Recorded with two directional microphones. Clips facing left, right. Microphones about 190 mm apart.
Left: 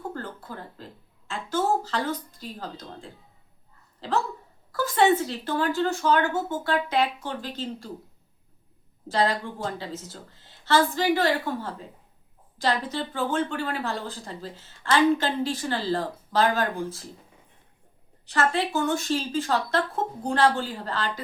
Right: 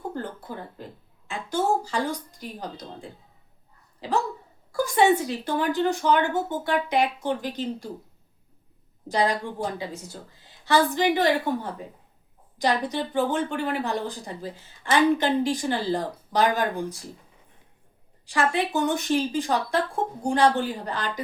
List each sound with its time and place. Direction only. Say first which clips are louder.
0.1 s a sound: right 3 dB; 15° right (ahead or behind)
1.3 s speech: right 1 dB; 15° right (ahead or behind)
4.7 s a woman's voice: right 1 dB; 15° right (ahead or behind)
9.0 s a woman's voice: right 1 dB; 15° right (ahead or behind)
18.3 s a woman's voice: right 1 dB; 15° right (ahead or behind)